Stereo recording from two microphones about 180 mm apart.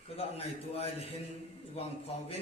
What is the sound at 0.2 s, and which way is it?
A man's voice, 35° left (ahead or behind).